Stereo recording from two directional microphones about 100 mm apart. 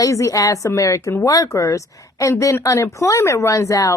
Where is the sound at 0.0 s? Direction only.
35° left (ahead or behind).